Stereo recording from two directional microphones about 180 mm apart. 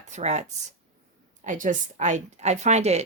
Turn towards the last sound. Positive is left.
turn(degrees=-40)  # may be behind; listen again after turning